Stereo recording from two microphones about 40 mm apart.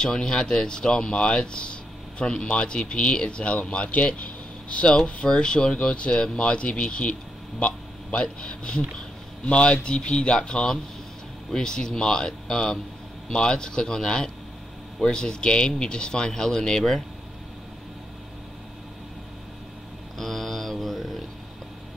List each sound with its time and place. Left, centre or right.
0.0 s speech: centre
7.6 s a sound: left
8.4 s speech: left
20.2 s mantra: centre